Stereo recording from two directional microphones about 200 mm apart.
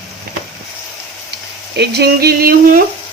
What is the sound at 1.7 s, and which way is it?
Speech, 55° right (ahead or behind).